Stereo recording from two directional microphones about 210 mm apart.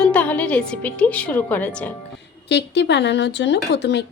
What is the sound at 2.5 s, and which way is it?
Speech, 55° left (ahead or behind).